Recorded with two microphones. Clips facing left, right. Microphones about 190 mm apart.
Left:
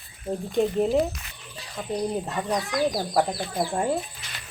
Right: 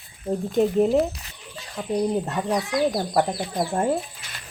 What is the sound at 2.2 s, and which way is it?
Speech, 5° right (ahead or behind).